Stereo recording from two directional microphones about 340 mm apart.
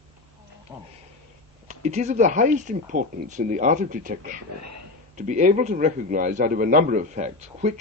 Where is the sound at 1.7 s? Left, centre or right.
Centre.